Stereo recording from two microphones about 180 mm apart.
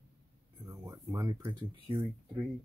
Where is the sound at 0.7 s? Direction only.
20° right (ahead or behind).